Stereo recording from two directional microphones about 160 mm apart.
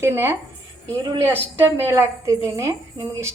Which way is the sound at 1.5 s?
15° right (ahead or behind).